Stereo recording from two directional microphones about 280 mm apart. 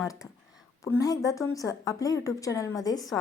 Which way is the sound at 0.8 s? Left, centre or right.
Centre.